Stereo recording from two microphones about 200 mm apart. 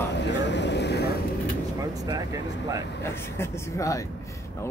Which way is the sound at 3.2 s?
10° left (ahead or behind).